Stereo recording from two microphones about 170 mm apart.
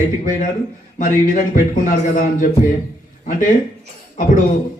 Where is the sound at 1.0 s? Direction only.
50° left (ahead or behind).